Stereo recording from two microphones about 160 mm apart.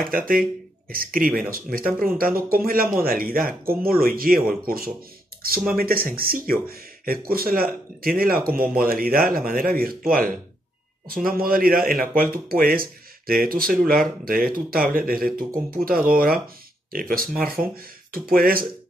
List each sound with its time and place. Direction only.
0.0 s speech: 65° right (ahead or behind)